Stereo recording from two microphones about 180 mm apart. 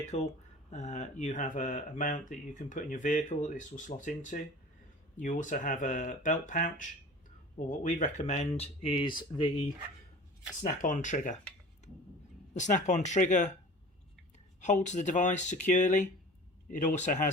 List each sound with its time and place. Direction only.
0.0 s speech: 40° left (ahead or behind); by 9.6 s 25° left (ahead or behind)
10.6 s speech: 45° left (ahead or behind)
12.5 s speech: 40° left (ahead or behind)